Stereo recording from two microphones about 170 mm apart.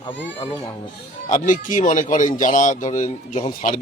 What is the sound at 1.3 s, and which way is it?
Speech, 50° left (ahead or behind).